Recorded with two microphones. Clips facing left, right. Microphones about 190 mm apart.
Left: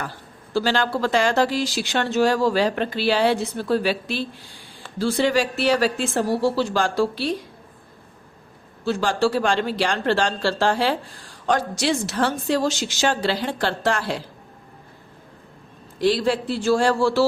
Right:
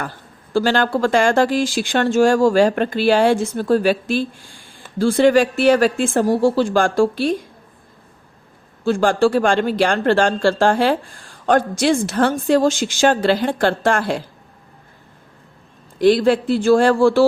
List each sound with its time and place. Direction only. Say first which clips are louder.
0.5 s speech: right 5 dB; 50° right (ahead or behind)
8.8 s speech: right 5 dB; 50° right (ahead or behind)
16.0 s speech: right 6 dB; 55° right (ahead or behind)